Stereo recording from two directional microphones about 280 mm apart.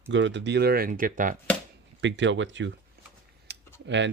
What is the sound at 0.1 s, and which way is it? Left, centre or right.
Speech, right.